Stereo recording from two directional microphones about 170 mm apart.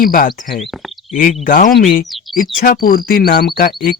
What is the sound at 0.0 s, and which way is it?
Speech, 55° left (ahead or behind).